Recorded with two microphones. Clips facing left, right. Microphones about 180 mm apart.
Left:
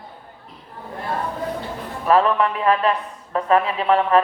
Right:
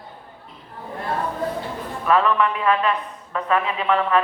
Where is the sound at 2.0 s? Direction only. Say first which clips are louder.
Left 2 dB; 35° left (ahead or behind).